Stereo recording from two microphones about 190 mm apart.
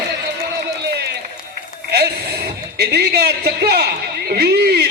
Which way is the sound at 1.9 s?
60° right (ahead or behind).